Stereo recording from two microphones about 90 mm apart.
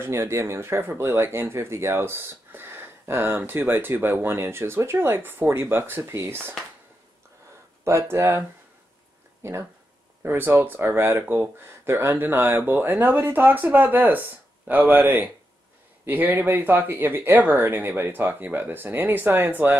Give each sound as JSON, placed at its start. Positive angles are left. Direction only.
{"t": 0.0, "sound": "speech", "side_deg": -30}
{"t": 7.8, "sound": "speech", "side_deg": -25}